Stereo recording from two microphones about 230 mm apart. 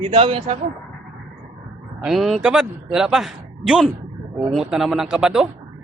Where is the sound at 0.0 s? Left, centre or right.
Right.